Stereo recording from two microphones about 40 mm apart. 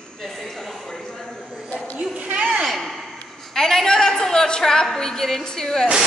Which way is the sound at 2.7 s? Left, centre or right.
Centre.